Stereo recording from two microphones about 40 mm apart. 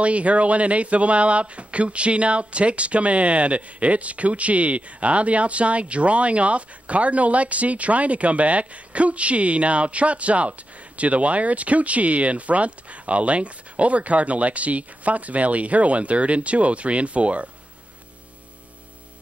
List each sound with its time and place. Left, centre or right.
0.0 s speech: right